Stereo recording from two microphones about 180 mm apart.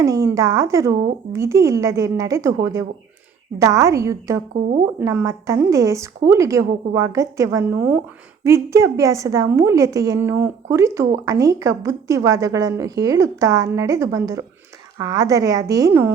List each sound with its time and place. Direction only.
0.0 s a woman's voice: 20° right (ahead or behind)